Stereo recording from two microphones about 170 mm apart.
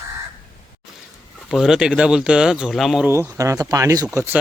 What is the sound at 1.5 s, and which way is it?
Speech, 5° right (ahead or behind).